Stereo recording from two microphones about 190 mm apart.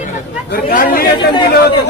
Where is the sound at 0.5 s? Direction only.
50° left (ahead or behind).